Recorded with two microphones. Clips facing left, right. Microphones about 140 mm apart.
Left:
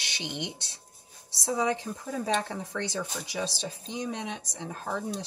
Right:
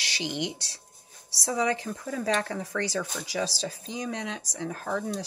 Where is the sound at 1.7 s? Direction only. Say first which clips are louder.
Right 1 dB; 90° right.